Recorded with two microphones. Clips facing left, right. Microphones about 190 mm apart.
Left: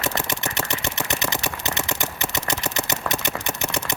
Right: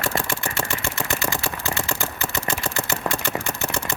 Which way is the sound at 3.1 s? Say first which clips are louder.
Right 1 dB; 20° left (ahead or behind).